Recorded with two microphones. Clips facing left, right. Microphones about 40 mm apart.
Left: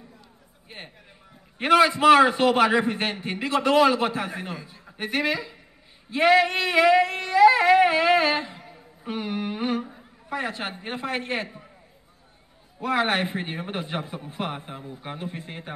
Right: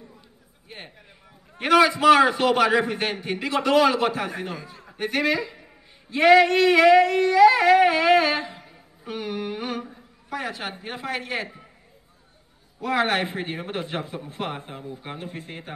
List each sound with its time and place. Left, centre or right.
1.6 s female singing: centre
7.8 s humming: centre
9.0 s a sound: centre
10.8 s female singing: centre
12.8 s female singing: centre